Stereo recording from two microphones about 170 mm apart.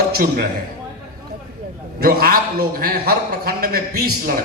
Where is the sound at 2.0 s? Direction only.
60° right (ahead or behind).